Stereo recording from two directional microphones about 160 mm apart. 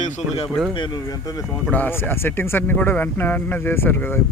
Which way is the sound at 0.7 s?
30° left (ahead or behind).